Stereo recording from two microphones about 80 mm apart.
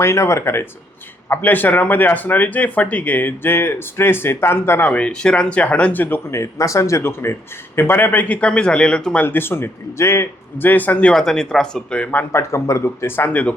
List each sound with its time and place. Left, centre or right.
0.0 s speech: left
4.9 s speech: centre
6.3 s speech: left; by 9.2 s centre
9.2 s speech: left
12.3 s speech: left
13.3 s speech: centre